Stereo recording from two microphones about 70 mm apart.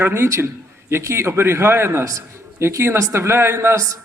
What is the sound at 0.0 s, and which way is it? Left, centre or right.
A man's voice, right.